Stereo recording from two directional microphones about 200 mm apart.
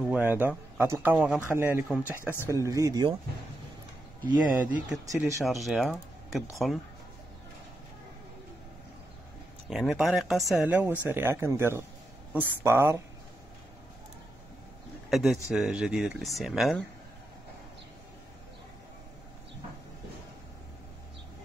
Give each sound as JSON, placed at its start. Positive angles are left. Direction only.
{"t": 0.0, "sound": "speech", "side_deg": -5}
{"t": 4.7, "sound": "speech", "side_deg": -5}
{"t": 9.7, "sound": "speech", "side_deg": 0}
{"t": 15.0, "sound": "speech", "side_deg": 0}